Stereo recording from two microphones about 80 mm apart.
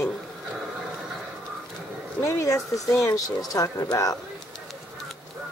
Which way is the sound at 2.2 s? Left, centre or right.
Left.